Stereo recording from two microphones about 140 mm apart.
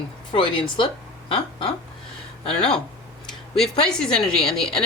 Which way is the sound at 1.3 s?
35° left (ahead or behind).